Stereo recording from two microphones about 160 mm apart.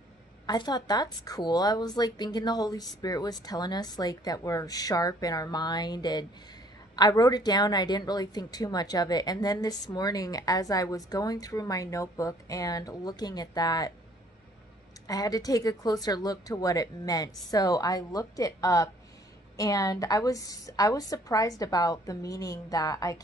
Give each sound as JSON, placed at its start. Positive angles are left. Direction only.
{"t": 0.5, "sound": "a woman's voice", "side_deg": 25}
{"t": 15.0, "sound": "a woman's voice", "side_deg": 25}